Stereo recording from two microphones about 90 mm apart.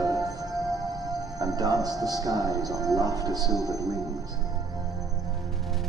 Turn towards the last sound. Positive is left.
turn(degrees=-45)  # may be behind; listen again after turning